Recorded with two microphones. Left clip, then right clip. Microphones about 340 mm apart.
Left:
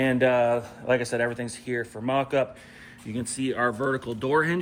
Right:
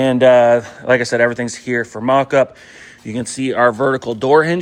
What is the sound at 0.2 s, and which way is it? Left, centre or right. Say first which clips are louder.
Speech: right 15 dB; centre.